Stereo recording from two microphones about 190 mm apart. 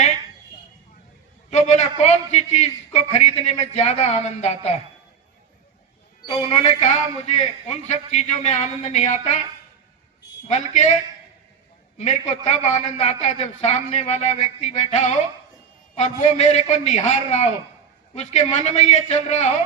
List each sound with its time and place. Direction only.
1.5 s a man's voice: 35° left (ahead or behind)
6.2 s a man's voice: 30° left (ahead or behind)
10.4 s a man's voice: 35° left (ahead or behind)
11.9 s a man's voice: 35° left (ahead or behind)